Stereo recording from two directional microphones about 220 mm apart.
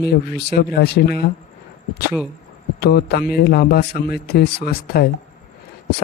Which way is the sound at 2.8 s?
45° left (ahead or behind).